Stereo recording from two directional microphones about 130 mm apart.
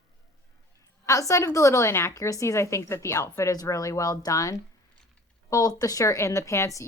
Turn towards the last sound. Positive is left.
turn(degrees=25)  # may be behind; listen again after turning